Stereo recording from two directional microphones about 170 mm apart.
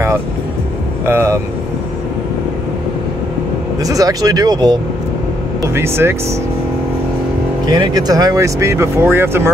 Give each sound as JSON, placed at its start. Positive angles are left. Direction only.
{"t": 1.0, "sound": "speech", "side_deg": -15}
{"t": 3.8, "sound": "speech", "side_deg": -20}
{"t": 5.8, "sound": "speech", "side_deg": -15}
{"t": 7.6, "sound": "speech", "side_deg": -25}